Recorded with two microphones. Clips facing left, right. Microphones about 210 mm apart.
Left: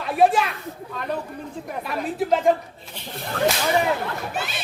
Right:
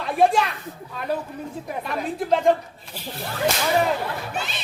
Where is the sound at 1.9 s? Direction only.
5° left (ahead or behind).